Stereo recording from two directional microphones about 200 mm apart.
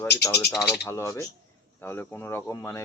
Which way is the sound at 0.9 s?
15° left (ahead or behind).